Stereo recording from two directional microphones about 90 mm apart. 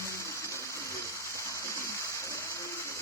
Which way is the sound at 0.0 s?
30° left (ahead or behind).